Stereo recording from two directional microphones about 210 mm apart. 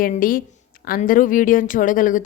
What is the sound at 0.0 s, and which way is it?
A woman's voice, 40° left (ahead or behind).